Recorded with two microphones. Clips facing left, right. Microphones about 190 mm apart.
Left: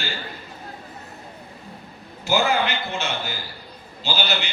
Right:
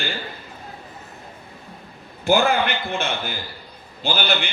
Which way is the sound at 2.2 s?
55° right (ahead or behind).